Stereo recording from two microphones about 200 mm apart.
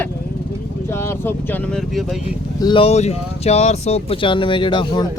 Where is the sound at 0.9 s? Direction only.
10° left (ahead or behind).